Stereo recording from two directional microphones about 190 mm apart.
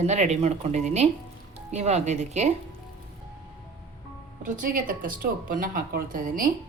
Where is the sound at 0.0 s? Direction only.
35° right (ahead or behind).